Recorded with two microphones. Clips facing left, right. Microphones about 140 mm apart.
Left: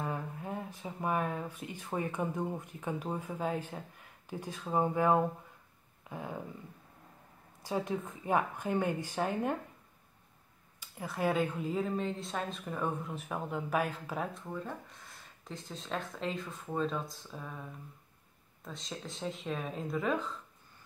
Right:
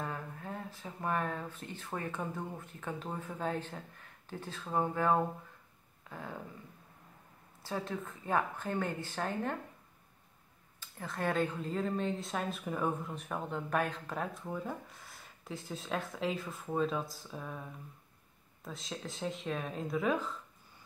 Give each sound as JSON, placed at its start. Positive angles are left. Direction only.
{"t": 0.0, "sound": "a woman's voice", "side_deg": 15}
{"t": 6.0, "sound": "a sound", "side_deg": 15}
{"t": 7.6, "sound": "a woman's voice", "side_deg": 15}
{"t": 10.8, "sound": "speech", "side_deg": 10}